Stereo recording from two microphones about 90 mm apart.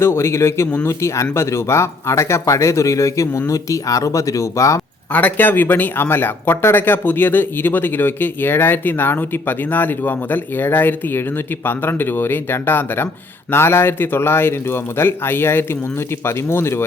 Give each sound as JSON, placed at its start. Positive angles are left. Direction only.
{"t": 0.0, "sound": "speech", "side_deg": 30}
{"t": 5.1, "sound": "speech", "side_deg": 20}